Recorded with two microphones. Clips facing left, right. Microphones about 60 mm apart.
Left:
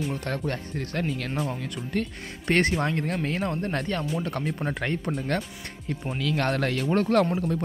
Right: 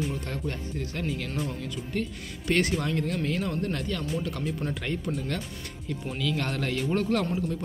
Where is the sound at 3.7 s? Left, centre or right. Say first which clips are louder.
Left 3 dB; left.